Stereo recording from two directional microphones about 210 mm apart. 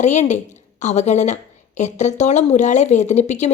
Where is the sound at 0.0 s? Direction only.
35° left (ahead or behind).